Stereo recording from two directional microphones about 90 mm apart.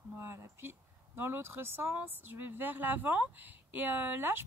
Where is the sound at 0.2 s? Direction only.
25° right (ahead or behind).